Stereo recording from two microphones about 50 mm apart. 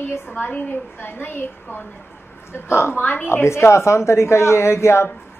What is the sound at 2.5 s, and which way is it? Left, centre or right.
Speech, left.